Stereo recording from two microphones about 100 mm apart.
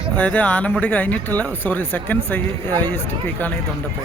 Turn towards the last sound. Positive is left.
turn(degrees=20)  # may be behind; listen again after turning